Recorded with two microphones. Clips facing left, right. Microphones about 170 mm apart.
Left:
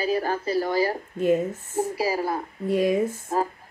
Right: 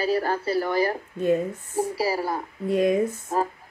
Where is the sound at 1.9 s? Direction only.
15° left (ahead or behind).